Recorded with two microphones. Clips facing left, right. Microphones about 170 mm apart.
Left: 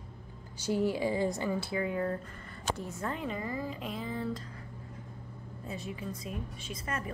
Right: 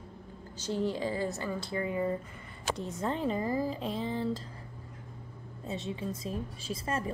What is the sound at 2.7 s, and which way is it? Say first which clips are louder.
A woman's voice: right 3 dB; 20° right (ahead or behind).